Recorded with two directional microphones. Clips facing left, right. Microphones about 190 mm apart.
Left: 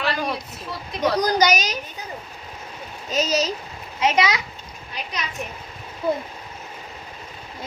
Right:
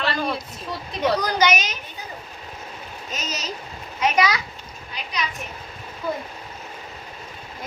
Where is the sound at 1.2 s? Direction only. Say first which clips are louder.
Left 2 dB; 40° left (ahead or behind).